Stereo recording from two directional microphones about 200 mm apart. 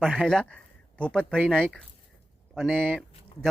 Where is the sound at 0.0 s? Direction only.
5° left (ahead or behind).